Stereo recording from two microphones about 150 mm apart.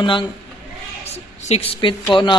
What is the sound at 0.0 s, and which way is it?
Speech, 35° left (ahead or behind).